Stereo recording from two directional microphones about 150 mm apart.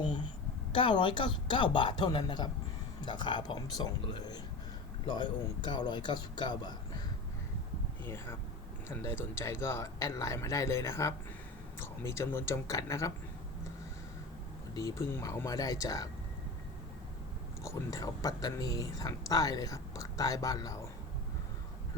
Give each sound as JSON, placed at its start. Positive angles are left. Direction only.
{"t": 0.7, "sound": "speech", "side_deg": 35}
{"t": 8.0, "sound": "speech", "side_deg": 15}
{"t": 14.8, "sound": "speech", "side_deg": 20}
{"t": 17.6, "sound": "speech", "side_deg": 20}